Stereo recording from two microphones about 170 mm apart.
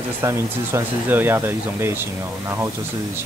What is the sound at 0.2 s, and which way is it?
Speech, 15° right (ahead or behind).